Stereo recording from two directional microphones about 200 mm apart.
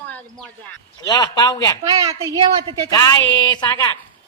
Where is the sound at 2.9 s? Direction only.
20° left (ahead or behind).